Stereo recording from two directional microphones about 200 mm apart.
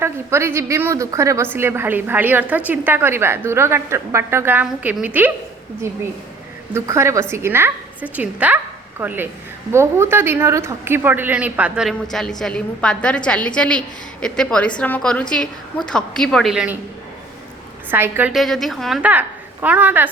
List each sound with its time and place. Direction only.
0.0 s a woman's voice: 15° right (ahead or behind)
6.7 s a woman's voice: 15° right (ahead or behind)
17.9 s a woman's voice: 10° right (ahead or behind)